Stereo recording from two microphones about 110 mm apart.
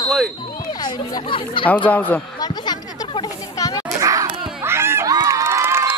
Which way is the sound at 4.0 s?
30° right (ahead or behind).